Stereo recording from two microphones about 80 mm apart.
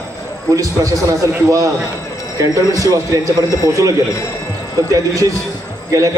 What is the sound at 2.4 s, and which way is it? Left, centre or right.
Speech, right.